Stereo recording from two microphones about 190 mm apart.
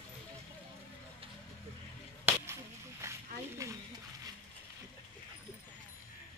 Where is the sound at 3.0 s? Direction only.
15° right (ahead or behind).